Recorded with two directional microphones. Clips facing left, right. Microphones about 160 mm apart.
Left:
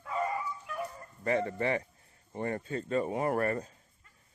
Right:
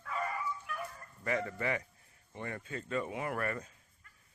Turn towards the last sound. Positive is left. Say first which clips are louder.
# left 7 dB
turn(degrees=35)  # may be behind; listen again after turning